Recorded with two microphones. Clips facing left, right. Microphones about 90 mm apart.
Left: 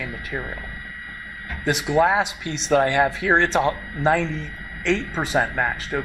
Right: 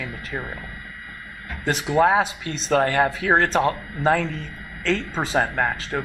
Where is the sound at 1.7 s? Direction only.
35° right (ahead or behind).